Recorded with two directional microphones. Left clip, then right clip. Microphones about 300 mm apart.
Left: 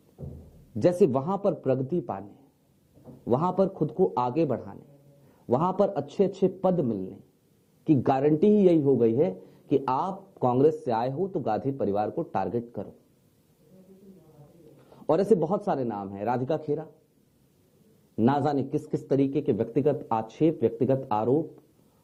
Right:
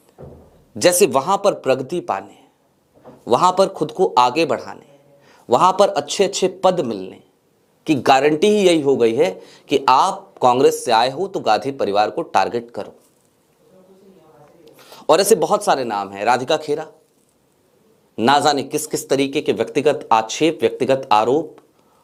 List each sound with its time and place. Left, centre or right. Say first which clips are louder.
0.8 s speech: right 8 dB; centre
3.0 s a sound: right 7 dB; centre
3.3 s speech: right 11 dB; centre
10.2 s a sound: right 12 dB; centre
10.5 s speech: right 8 dB; centre
14.3 s a man's voice: right 8 dB; centre
18.2 s speech: right 10 dB; centre